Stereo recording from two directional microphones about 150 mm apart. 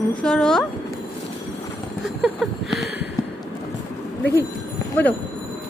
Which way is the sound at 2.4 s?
Centre (ahead or behind).